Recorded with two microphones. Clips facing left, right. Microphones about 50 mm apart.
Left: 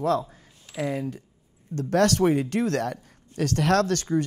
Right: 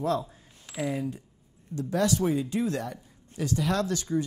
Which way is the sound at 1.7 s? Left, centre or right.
Left.